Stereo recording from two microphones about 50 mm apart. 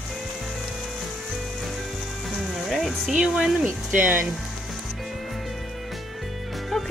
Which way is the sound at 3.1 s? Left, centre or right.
Centre.